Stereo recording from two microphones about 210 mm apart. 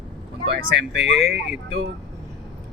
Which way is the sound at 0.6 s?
60° right (ahead or behind).